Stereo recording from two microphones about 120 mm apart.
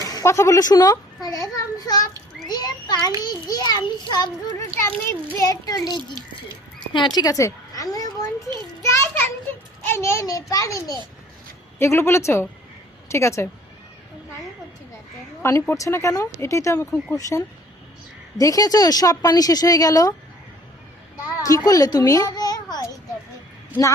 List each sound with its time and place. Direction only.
0.1 s a child's voice: 30° left (ahead or behind)
5.4 s a child's voice: 30° left (ahead or behind)
6.9 s a sound: 40° left (ahead or behind)
8.9 s children playing: 20° left (ahead or behind)
9.8 s a child's voice: 20° left (ahead or behind)
15.4 s a child's voice: 25° left (ahead or behind)
21.3 s a child's voice: 30° left (ahead or behind)